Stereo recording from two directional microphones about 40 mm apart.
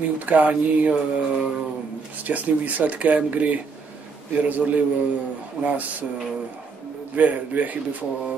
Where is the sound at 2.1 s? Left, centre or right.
Right.